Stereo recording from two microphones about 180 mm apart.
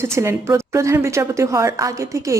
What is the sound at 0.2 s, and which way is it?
Speech, 15° right (ahead or behind).